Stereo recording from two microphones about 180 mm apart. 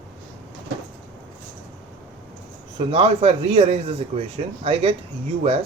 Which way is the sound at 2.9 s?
30° right (ahead or behind).